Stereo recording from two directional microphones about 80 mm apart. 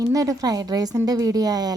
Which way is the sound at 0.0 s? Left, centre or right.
Right.